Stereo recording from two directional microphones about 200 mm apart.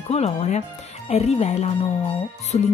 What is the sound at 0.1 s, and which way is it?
A woman's voice, 35° left (ahead or behind).